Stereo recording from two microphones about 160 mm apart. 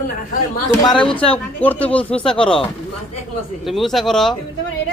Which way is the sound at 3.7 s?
Centre (ahead or behind).